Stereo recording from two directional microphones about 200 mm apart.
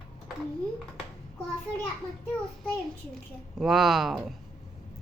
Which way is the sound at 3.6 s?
Centre (ahead or behind).